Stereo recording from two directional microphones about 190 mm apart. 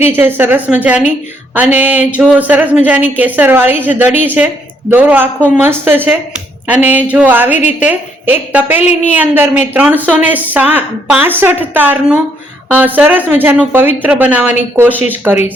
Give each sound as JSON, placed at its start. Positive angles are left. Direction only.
{"t": 0.1, "sound": "a woman's voice", "side_deg": -10}
{"t": 8.8, "sound": "a woman's voice", "side_deg": 35}
{"t": 9.1, "sound": "a woman's voice", "side_deg": -10}